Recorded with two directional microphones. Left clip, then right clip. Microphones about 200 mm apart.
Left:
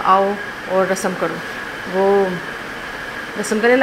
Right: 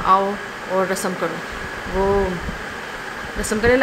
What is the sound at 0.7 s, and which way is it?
Speech, 5° left (ahead or behind).